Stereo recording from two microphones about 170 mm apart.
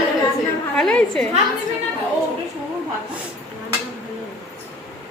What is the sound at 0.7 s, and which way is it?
Speech, 5° left (ahead or behind).